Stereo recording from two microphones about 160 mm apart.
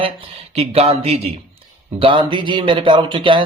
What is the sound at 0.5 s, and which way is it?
Speech, 40° right (ahead or behind).